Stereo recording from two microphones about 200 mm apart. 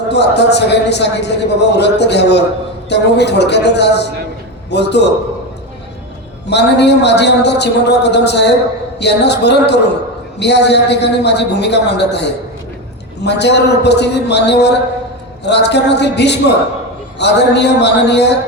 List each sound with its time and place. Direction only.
0.1 s a man's voice: 60° left (ahead or behind)
6.5 s a man's voice: 60° left (ahead or behind)